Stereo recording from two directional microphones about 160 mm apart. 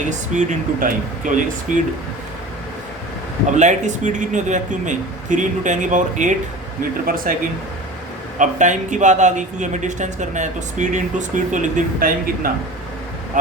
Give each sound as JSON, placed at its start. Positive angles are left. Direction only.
{"t": 0.1, "sound": "speech", "side_deg": -50}
{"t": 3.6, "sound": "speech", "side_deg": -50}
{"t": 7.1, "sound": "speech", "side_deg": -65}
{"t": 8.4, "sound": "speech", "side_deg": -50}